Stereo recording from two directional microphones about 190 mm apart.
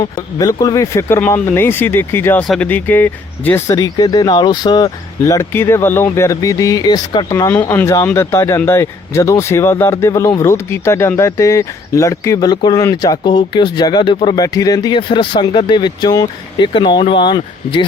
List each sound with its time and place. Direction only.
0.0 s speech: 20° left (ahead or behind)